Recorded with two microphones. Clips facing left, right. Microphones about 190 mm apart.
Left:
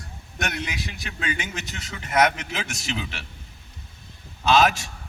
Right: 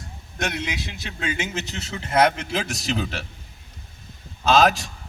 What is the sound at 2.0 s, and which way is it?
A man's voice, 30° right (ahead or behind).